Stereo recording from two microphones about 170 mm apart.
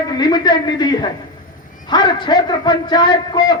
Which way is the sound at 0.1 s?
25° left (ahead or behind).